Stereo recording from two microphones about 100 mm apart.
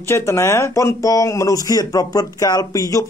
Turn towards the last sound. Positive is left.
turn(degrees=35)  # may be behind; listen again after turning